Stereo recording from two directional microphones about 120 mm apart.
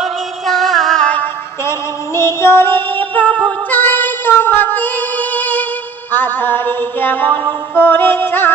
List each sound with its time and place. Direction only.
0.0 s music: centre (ahead or behind)
1.7 s music: 25° left (ahead or behind)